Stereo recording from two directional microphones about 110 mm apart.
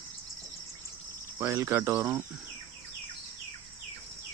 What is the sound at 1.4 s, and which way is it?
Speech, 25° right (ahead or behind).